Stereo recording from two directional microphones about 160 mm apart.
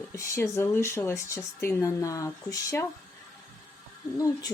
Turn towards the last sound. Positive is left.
turn(degrees=20)  # may be behind; listen again after turning